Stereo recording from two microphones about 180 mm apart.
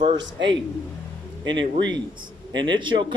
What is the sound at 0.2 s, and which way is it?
Speech, 80° right.